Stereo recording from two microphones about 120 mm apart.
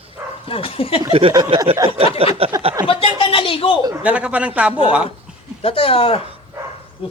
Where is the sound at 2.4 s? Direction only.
55° right (ahead or behind).